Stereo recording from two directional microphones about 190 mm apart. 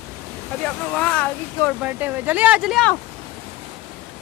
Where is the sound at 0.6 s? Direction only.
5° left (ahead or behind).